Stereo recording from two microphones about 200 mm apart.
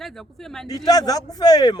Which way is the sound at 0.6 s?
20° left (ahead or behind).